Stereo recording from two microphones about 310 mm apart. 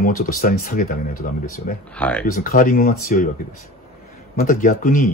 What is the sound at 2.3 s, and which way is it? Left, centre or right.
Speech, left.